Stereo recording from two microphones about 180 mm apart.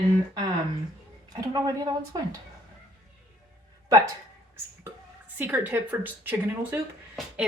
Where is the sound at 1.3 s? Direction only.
20° right (ahead or behind).